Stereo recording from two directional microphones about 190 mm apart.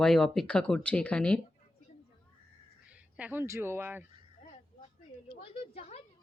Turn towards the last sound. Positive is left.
turn(degrees=30)  # may be behind; listen again after turning